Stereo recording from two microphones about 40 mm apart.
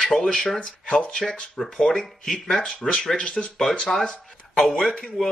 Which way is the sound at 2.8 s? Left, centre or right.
Centre.